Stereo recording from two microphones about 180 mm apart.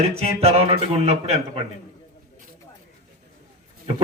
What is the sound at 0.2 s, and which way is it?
Speech, 35° right (ahead or behind).